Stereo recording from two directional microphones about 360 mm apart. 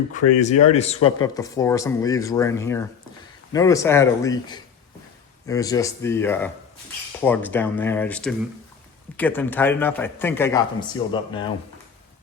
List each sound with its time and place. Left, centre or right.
0.2 s a man's voice: left